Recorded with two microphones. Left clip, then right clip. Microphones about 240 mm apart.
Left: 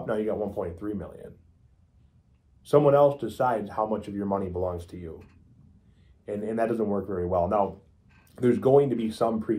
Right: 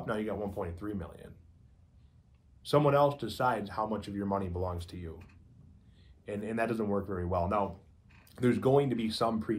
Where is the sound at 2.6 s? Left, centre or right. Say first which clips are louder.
Left 7 dB; centre.